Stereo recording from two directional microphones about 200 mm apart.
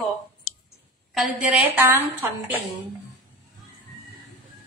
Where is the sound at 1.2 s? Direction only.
Centre (ahead or behind).